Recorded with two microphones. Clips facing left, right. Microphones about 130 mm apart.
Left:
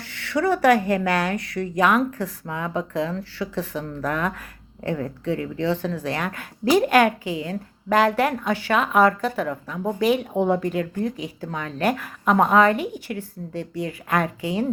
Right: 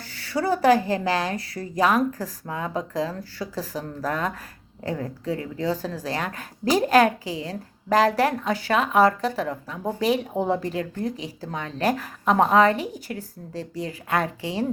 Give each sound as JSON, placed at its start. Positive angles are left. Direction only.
{"t": 0.0, "sound": "speech", "side_deg": -35}